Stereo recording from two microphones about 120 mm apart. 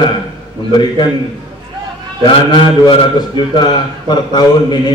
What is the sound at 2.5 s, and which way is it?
A man's voice, 40° left (ahead or behind).